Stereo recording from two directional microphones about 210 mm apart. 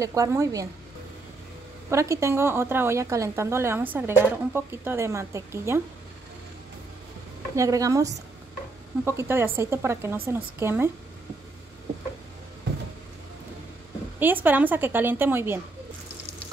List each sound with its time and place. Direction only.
0.0 s a woman's voice: 15° right (ahead or behind)
1.9 s a woman's voice: 15° right (ahead or behind)
7.5 s a woman's voice: 15° right (ahead or behind)
14.2 s a woman's voice: 10° right (ahead or behind)